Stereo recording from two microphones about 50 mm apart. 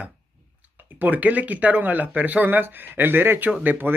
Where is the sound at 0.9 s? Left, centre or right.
Right.